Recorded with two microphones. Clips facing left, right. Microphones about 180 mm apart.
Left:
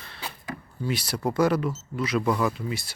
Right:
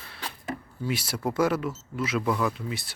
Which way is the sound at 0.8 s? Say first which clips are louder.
Left 2 dB; 5° right (ahead or behind).